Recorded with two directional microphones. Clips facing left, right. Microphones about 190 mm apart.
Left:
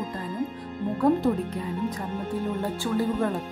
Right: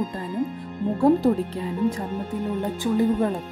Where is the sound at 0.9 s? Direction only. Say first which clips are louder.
Right 4 dB; 30° right (ahead or behind).